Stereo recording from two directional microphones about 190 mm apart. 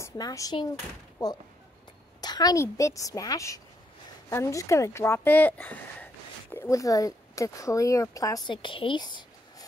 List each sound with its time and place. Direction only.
0.0 s speech: 15° left (ahead or behind)